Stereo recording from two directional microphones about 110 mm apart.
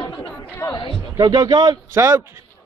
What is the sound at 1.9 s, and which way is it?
Speech, 25° right (ahead or behind).